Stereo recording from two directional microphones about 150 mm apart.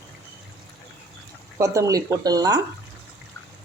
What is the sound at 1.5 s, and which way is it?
Speech, 20° right (ahead or behind).